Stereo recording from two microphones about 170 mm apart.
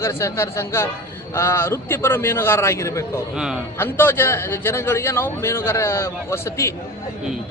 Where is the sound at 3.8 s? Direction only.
15° left (ahead or behind).